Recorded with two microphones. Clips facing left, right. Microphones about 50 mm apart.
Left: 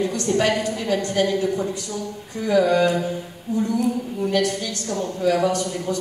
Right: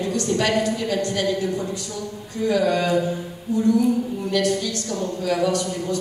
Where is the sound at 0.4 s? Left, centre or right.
Left.